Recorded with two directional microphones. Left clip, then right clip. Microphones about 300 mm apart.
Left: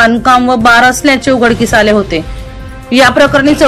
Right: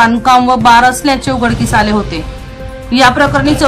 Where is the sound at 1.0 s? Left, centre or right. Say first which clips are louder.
Left 4 dB; centre.